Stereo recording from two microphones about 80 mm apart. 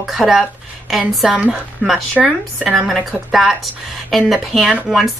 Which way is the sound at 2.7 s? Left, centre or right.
Centre.